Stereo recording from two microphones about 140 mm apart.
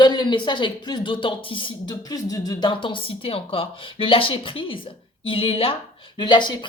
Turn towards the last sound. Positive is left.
turn(degrees=35)  # may be behind; listen again after turning